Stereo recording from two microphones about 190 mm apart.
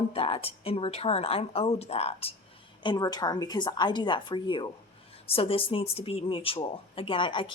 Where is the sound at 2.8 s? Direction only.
20° left (ahead or behind).